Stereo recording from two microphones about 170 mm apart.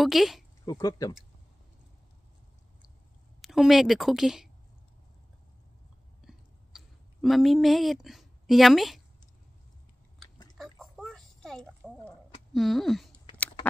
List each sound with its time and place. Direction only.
0.0 s speech: centre (ahead or behind)
0.7 s speech: 20° left (ahead or behind)
3.3 s a woman's voice: centre (ahead or behind)
6.2 s clicking: centre (ahead or behind)
10.6 s a sound: centre (ahead or behind)
12.5 s speech: centre (ahead or behind)